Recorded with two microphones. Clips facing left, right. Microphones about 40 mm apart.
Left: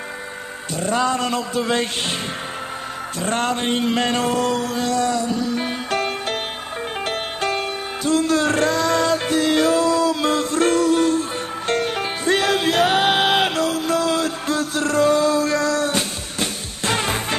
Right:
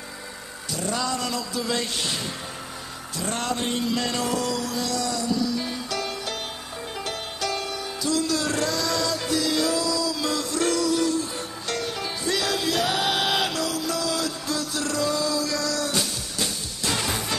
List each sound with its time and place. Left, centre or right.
0.7 s mantra: left
3.2 s mantra: left
7.1 s music: left